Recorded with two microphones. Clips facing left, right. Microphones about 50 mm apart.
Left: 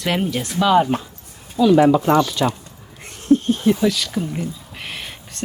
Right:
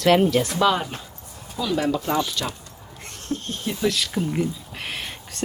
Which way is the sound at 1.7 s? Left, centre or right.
Left.